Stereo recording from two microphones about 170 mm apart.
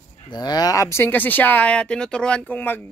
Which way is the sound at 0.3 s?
25° left (ahead or behind).